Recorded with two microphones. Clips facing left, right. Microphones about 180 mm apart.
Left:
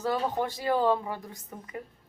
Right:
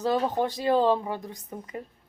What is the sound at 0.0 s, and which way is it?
Speech, 20° right (ahead or behind).